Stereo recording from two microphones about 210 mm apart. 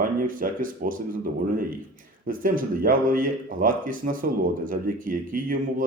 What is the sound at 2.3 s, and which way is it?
Speech, 40° right (ahead or behind).